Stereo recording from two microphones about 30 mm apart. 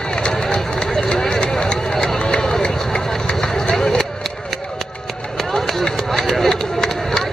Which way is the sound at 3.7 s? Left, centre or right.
Left.